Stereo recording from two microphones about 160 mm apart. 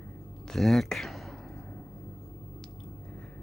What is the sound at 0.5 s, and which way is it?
Speech, centre (ahead or behind).